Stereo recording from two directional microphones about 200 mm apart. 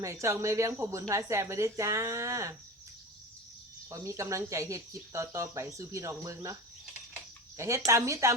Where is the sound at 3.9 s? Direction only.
15° right (ahead or behind).